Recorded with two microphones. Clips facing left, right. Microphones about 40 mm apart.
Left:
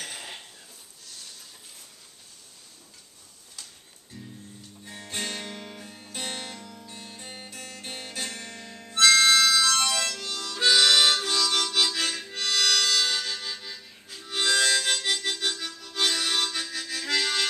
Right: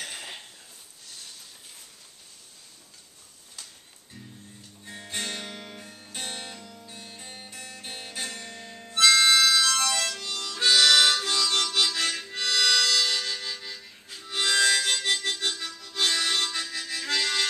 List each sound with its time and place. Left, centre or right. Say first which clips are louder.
0.0 s a sound: even; centre
4.8 s guitar: even; centre
6.0 s music: left 2 dB; centre
7.8 s harmonica: left 1 dB; centre